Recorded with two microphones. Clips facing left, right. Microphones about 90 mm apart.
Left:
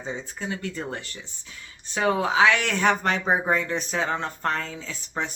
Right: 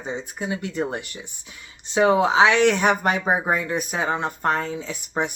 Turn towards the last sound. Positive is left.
turn(degrees=-15)  # may be behind; listen again after turning